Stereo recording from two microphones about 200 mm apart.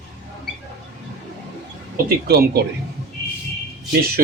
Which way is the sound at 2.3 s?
50° right (ahead or behind).